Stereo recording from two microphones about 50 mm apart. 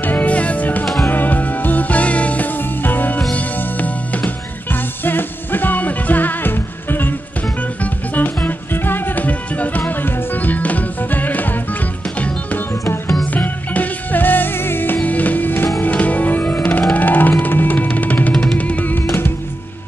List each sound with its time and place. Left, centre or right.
0.0 s music: left
15.0 s music: left
15.8 s music: left